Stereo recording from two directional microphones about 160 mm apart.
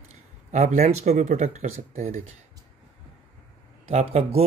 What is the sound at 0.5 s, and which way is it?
Speech, 45° right (ahead or behind).